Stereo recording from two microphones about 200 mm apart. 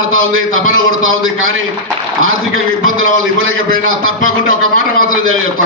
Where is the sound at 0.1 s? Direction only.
90° right.